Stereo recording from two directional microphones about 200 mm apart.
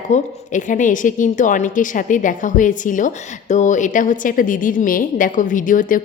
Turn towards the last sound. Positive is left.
turn(degrees=40)  # may be behind; listen again after turning